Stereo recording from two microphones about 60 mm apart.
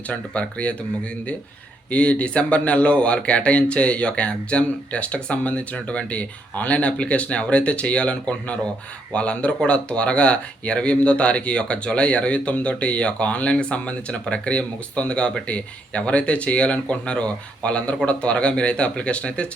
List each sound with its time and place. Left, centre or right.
0.1 s speech: left
1.9 s speech: left